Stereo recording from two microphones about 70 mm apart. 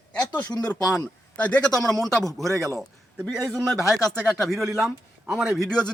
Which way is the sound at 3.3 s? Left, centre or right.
Centre.